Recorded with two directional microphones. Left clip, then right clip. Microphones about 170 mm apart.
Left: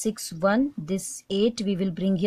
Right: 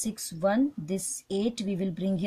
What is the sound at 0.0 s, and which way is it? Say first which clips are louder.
Speech: left 4 dB; 40° left (ahead or behind).